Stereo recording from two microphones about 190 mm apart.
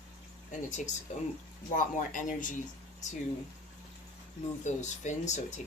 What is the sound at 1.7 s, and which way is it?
Speech, 45° left (ahead or behind).